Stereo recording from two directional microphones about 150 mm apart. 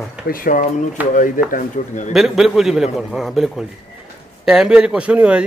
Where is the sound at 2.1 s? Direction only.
5° right (ahead or behind).